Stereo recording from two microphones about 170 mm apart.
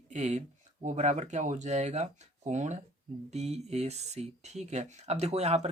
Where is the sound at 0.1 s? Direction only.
45° right (ahead or behind).